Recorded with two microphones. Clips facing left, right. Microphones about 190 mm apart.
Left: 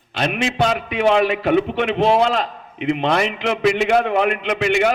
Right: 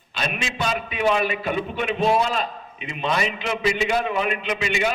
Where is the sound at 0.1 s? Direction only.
65° left (ahead or behind).